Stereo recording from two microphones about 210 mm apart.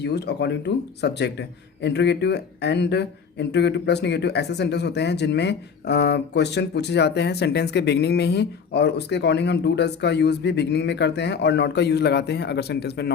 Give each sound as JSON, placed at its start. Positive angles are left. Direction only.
{"t": 0.0, "sound": "a man's voice", "side_deg": 50}